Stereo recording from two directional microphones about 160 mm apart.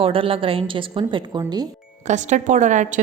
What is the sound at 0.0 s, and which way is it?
A woman's voice, 35° right (ahead or behind).